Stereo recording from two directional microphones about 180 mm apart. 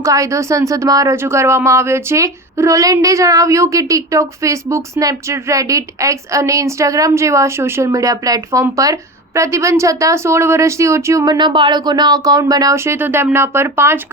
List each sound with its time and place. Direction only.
0.0 s speech: 15° right (ahead or behind)